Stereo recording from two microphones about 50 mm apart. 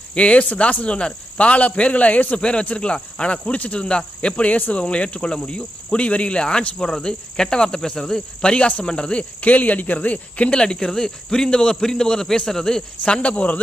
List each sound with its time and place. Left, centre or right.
0.1 s cricket: left
9.4 s speech: left; by 12.8 s centre
13.0 s cricket: left